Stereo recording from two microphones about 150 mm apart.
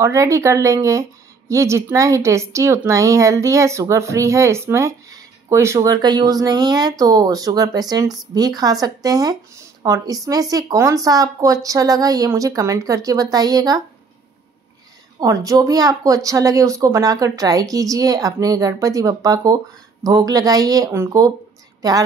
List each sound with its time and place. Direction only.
0.0 s a woman's voice: 20° right (ahead or behind)
15.1 s a woman's voice: 25° right (ahead or behind)